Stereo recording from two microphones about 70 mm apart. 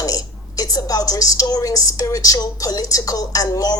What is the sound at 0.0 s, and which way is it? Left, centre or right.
A woman's voice, left.